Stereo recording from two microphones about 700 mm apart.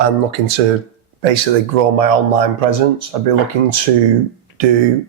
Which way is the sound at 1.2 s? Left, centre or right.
Right.